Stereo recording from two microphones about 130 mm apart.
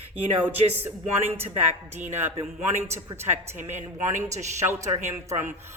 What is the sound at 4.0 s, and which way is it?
Speech, 70° right (ahead or behind).